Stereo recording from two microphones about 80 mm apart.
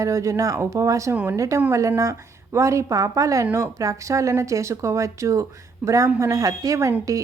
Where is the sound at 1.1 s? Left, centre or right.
Right.